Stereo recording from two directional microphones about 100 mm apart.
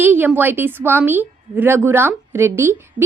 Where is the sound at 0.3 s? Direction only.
20° right (ahead or behind).